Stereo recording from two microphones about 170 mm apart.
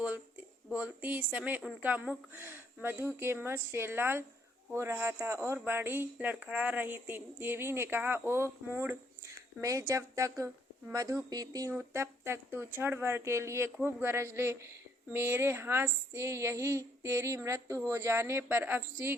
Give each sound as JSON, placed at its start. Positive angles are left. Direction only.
{"t": 0.7, "sound": "a woman's voice", "side_deg": -10}